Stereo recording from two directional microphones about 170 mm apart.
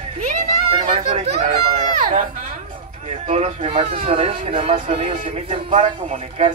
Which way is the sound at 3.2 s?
40° right (ahead or behind).